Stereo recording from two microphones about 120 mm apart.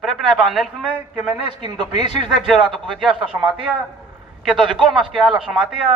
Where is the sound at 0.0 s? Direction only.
Centre (ahead or behind).